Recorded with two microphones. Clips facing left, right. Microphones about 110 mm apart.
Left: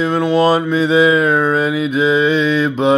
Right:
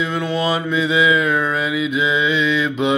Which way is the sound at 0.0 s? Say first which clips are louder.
Left 7 dB; 40° left (ahead or behind).